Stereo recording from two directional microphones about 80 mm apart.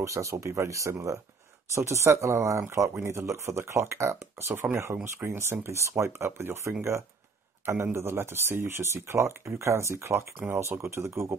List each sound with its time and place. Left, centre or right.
0.0 s speech: right